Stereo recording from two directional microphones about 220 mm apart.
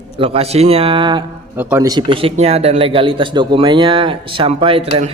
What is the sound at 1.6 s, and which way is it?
Speech, 10° right (ahead or behind).